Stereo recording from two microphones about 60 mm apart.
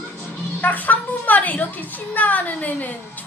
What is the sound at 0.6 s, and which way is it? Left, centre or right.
A woman's voice, left.